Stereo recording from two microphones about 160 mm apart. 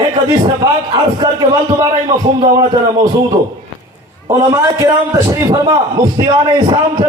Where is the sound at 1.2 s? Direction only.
25° right (ahead or behind).